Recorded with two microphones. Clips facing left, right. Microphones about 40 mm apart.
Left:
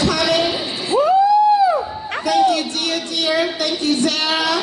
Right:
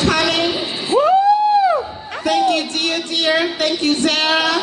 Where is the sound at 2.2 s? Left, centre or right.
Right.